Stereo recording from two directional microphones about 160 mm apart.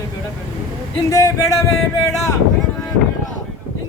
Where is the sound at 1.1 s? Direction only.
20° left (ahead or behind).